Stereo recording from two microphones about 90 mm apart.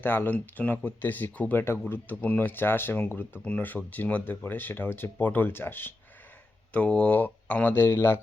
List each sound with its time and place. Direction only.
0.0 s speech: 20° left (ahead or behind)
6.7 s speech: 10° left (ahead or behind)